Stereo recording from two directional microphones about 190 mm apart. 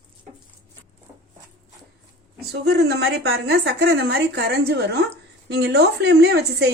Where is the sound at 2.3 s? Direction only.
60° right (ahead or behind).